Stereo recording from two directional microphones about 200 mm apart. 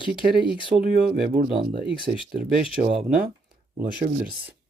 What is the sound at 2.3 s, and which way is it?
Speech, 45° right (ahead or behind).